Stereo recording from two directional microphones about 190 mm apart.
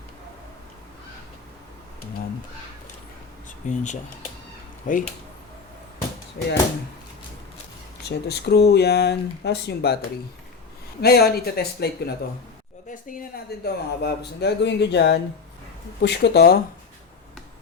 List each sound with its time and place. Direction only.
3.6 s speech: 40° left (ahead or behind)
4.9 s speech: 45° left (ahead or behind)
6.4 s speech: 55° left (ahead or behind)
8.0 s speech: 60° left (ahead or behind)
11.0 s speech: 55° left (ahead or behind)
12.9 s speech: 45° left (ahead or behind)